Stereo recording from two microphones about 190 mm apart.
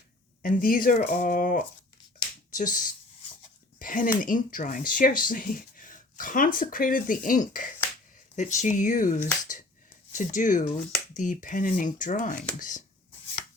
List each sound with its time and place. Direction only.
0.4 s speech: 50° left (ahead or behind)